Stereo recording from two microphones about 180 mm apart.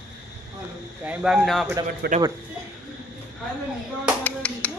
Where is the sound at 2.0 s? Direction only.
60° right (ahead or behind).